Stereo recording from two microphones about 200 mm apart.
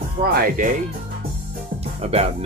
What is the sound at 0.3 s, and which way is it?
Speech, 45° right (ahead or behind).